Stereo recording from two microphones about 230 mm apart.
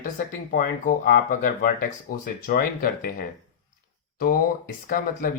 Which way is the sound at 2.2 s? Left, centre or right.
Left.